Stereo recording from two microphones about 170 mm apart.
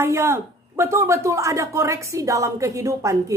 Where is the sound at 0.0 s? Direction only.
15° right (ahead or behind).